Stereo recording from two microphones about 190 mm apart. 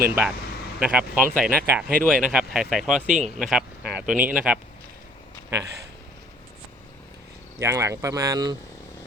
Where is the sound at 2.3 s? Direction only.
5° right (ahead or behind).